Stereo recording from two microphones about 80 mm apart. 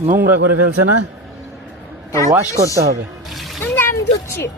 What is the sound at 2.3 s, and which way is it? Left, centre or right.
Speech, right.